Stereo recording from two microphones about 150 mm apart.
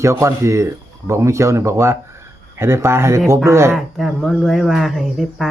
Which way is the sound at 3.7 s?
Centre (ahead or behind).